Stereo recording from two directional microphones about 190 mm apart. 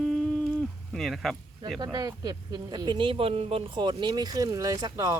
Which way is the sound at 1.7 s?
20° right (ahead or behind).